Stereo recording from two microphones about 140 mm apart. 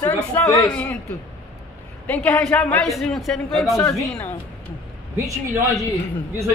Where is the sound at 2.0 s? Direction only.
10° left (ahead or behind).